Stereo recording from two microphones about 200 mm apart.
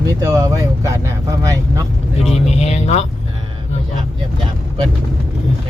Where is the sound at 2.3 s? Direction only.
35° left (ahead or behind).